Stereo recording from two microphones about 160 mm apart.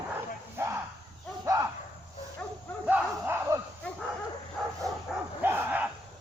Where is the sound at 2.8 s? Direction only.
10° right (ahead or behind).